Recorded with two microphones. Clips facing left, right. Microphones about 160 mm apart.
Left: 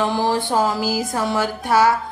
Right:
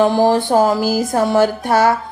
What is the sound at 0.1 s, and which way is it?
Music, 45° right (ahead or behind).